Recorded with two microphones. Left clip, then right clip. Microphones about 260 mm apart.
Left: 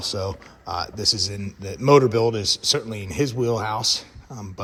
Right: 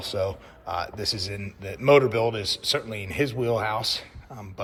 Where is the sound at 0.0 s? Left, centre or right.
Centre.